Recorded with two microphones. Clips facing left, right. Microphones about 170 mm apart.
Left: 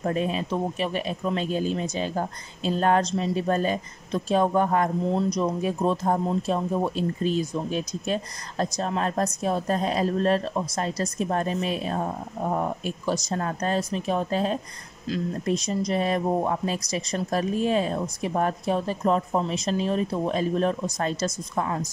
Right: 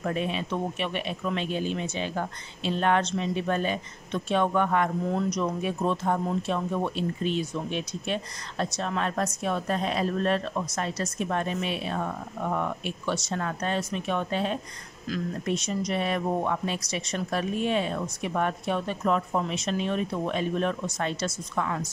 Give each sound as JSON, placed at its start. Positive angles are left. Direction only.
{"t": 0.0, "sound": "speech", "side_deg": 40}